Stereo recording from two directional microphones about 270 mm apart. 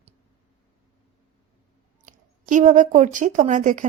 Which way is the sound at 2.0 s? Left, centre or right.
Right.